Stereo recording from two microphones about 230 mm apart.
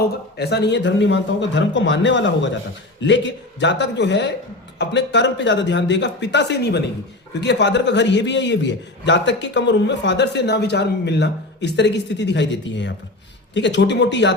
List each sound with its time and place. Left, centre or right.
0.3 s a man's voice: left